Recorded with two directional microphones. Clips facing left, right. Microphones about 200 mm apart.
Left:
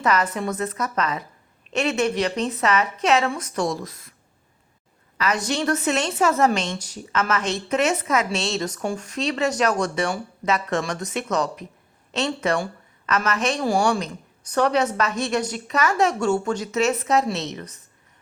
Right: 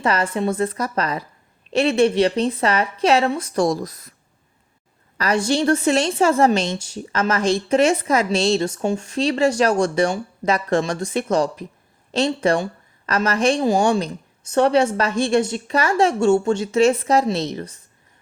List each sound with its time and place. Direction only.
0.0 s a woman's voice: 30° right (ahead or behind)
5.1 s a woman's voice: 35° right (ahead or behind)